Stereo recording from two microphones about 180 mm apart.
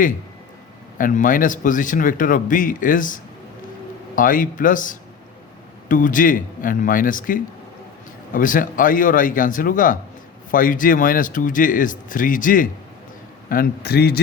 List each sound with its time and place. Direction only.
0.9 s a man's voice: 50° left (ahead or behind)